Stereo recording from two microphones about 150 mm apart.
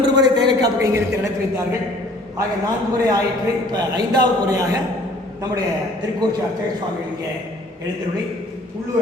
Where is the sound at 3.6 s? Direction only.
25° right (ahead or behind).